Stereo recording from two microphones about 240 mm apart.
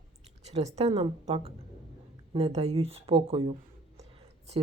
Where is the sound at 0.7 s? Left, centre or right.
Right.